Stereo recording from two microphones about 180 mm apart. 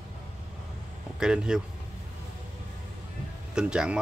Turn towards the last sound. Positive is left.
turn(degrees=-5)  # may be behind; listen again after turning